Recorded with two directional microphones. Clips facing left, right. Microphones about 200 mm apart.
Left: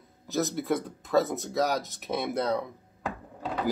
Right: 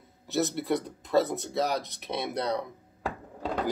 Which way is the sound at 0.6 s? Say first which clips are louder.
Even; centre (ahead or behind).